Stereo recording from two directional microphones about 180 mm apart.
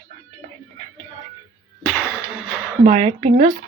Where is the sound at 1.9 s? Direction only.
5° right (ahead or behind).